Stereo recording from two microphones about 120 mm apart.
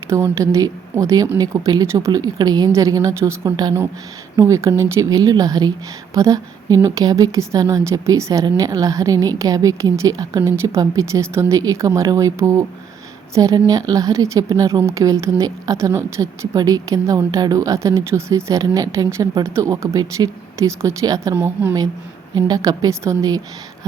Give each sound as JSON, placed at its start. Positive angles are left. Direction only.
{"t": 0.1, "sound": "a woman's voice", "side_deg": -25}
{"t": 21.3, "sound": "a woman's voice", "side_deg": -15}
{"t": 22.4, "sound": "speech", "side_deg": -35}